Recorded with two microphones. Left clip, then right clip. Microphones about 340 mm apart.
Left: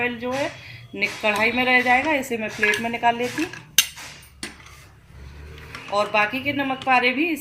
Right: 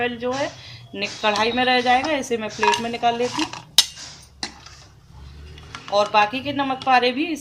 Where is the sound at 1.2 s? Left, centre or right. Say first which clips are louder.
Right 2 dB; right.